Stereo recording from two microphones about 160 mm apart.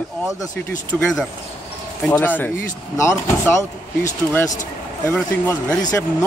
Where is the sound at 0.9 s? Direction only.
Centre (ahead or behind).